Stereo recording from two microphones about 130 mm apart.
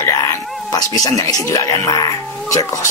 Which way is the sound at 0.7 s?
30° left (ahead or behind).